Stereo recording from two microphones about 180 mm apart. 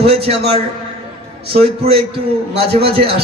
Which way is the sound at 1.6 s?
35° right (ahead or behind).